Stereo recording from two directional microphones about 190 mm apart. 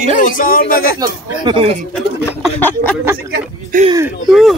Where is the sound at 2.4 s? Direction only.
10° left (ahead or behind).